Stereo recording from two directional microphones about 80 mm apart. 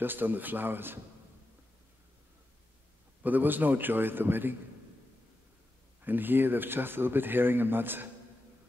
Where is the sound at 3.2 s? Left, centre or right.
Right.